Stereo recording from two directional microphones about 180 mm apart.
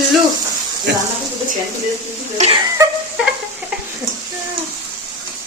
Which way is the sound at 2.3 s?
35° right (ahead or behind).